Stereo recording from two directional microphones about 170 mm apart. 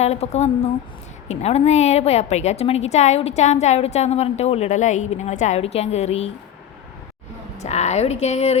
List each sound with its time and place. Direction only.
0.0 s a woman's voice: 40° left (ahead or behind)
7.6 s a woman's voice: 40° left (ahead or behind)